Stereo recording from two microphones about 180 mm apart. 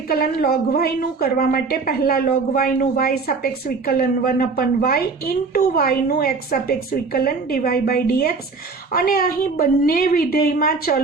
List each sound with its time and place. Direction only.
0.1 s a woman's voice: 55° left (ahead or behind)